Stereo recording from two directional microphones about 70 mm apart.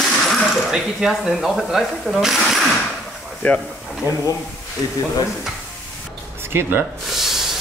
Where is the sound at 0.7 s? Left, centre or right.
Centre.